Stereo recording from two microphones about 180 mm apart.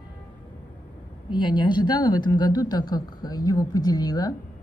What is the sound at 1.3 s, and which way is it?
Speech, 25° left (ahead or behind).